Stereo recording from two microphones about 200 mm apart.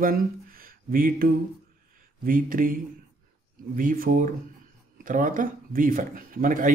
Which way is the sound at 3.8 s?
40° right (ahead or behind).